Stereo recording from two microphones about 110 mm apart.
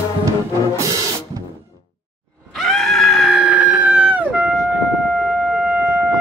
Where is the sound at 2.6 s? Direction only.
Centre (ahead or behind).